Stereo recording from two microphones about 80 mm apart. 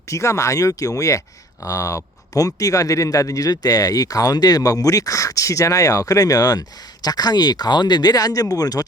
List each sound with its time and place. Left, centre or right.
0.1 s a man's voice: left